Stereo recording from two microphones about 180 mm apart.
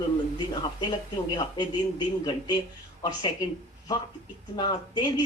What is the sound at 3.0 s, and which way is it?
Speech, 25° left (ahead or behind).